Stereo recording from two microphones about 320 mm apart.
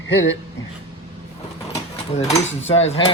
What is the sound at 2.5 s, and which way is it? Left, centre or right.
Cutlery, centre.